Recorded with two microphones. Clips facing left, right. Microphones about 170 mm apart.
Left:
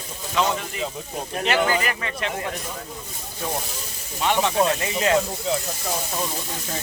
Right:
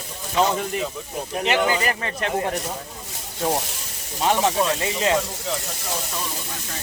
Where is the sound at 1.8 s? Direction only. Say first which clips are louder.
Right 2 dB; 40° right (ahead or behind).